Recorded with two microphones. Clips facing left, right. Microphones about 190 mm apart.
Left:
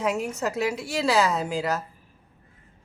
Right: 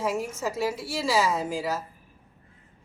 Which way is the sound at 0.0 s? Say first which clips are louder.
Left 2 dB; 70° left (ahead or behind).